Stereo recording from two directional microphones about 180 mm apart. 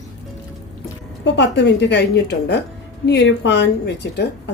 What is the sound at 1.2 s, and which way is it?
A woman's voice, 75° left (ahead or behind).